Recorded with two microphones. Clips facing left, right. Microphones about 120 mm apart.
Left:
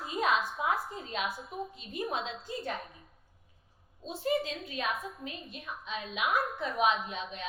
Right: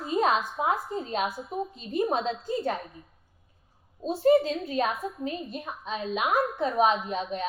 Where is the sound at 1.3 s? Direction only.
Centre (ahead or behind).